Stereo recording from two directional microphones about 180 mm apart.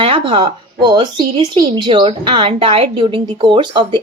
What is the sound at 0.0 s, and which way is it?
Speech, 30° right (ahead or behind).